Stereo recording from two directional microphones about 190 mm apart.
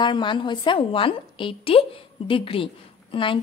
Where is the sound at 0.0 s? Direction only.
25° left (ahead or behind).